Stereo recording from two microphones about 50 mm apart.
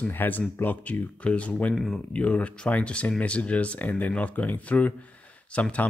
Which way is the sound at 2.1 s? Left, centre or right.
Left.